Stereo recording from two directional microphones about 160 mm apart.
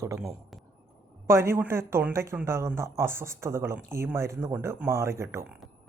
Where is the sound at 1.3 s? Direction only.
15° right (ahead or behind).